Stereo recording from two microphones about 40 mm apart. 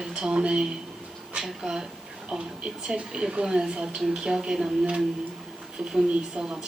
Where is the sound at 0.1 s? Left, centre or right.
Right.